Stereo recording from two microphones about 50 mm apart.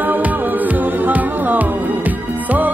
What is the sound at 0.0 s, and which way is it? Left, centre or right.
Music, right.